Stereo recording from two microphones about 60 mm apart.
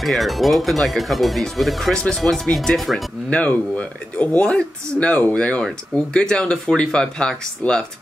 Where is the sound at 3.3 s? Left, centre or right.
Left.